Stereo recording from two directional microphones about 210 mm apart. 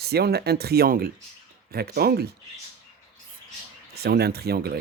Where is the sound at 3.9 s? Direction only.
50° right (ahead or behind).